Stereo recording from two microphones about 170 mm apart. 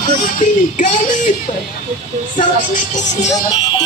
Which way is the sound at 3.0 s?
45° left (ahead or behind).